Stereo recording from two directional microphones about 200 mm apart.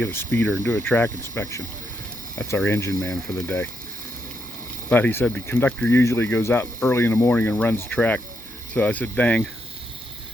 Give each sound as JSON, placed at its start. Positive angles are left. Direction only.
{"t": 0.0, "sound": "speech", "side_deg": 10}
{"t": 4.9, "sound": "speech", "side_deg": 10}